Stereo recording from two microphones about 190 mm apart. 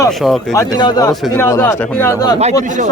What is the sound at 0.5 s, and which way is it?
A man's voice, 20° left (ahead or behind).